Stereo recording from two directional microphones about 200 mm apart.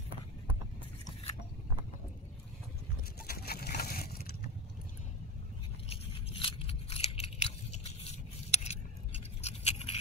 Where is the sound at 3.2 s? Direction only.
50° left (ahead or behind).